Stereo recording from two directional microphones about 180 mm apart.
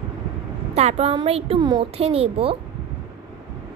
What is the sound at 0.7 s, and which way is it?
A woman's voice, 35° right (ahead or behind).